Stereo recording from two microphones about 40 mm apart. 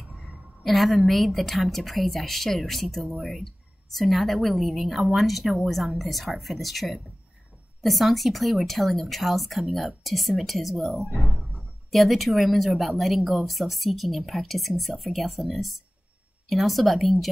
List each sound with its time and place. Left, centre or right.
0.7 s a woman's voice: centre